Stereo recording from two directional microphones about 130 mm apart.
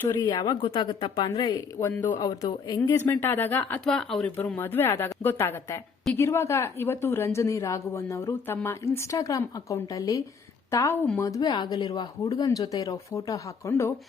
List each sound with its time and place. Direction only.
0.1 s a woman's voice: 30° left (ahead or behind)
3.1 s speech: 15° left (ahead or behind)
3.8 s speech: 5° left (ahead or behind)
4.4 s a woman's voice: 15° left (ahead or behind)